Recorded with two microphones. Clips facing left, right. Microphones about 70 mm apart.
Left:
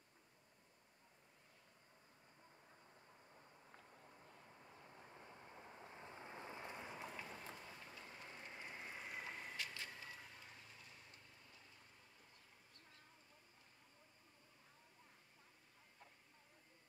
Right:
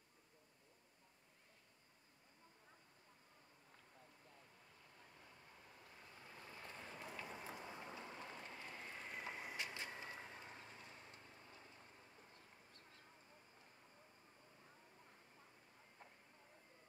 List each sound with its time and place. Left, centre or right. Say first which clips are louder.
4.6 s vehicle: left 5 dB; left
7.2 s vehicle: right 2 dB; centre
7.6 s vehicle: right 5 dB; right
8.5 s vehicle: even; left
9.2 s vehicle: right 1 dB; centre
9.6 s vehicle: right 2 dB; right